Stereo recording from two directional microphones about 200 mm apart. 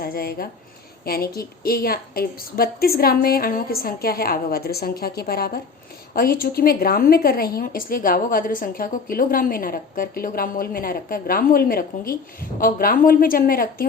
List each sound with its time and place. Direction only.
0.0 s a woman's voice: 50° left (ahead or behind)